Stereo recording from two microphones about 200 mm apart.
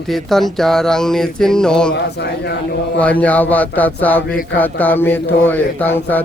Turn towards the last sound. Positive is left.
turn(degrees=10)  # may be behind; listen again after turning